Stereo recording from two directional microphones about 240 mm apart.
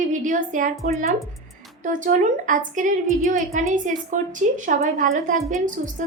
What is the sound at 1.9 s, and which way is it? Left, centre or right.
A woman's voice, right.